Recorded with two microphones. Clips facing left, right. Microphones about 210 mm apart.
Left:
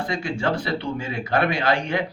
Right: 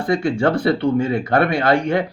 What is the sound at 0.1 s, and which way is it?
Speech, 55° right (ahead or behind).